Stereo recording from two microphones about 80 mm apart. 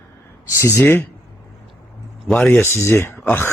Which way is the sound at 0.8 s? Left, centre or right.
Left.